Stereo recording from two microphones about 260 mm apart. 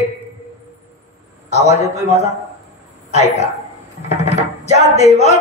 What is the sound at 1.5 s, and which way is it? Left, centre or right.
Speech, left.